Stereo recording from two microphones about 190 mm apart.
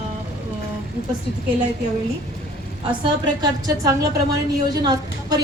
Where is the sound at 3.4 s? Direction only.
20° right (ahead or behind).